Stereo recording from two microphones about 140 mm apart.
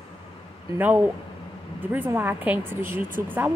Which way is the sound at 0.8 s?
10° right (ahead or behind).